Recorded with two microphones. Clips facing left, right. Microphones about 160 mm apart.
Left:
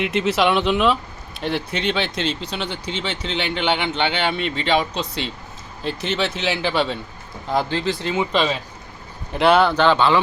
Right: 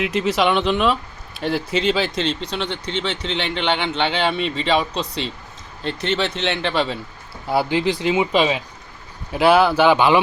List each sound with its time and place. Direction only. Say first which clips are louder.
0.0 s speech: even; centre (ahead or behind)